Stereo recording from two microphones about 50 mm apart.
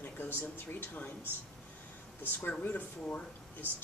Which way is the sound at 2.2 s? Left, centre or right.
Left.